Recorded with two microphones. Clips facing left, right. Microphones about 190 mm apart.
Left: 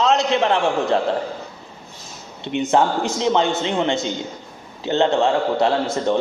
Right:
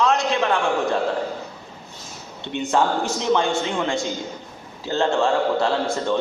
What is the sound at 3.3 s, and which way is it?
A woman's voice, 20° left (ahead or behind).